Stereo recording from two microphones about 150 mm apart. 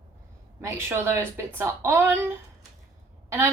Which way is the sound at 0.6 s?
15° right (ahead or behind).